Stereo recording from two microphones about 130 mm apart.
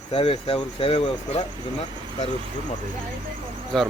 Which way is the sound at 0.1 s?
45° left (ahead or behind).